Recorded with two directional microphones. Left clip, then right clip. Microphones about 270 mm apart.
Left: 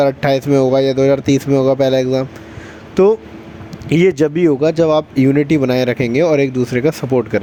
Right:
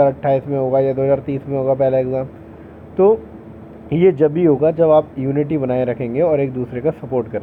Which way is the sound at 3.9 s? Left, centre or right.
Left.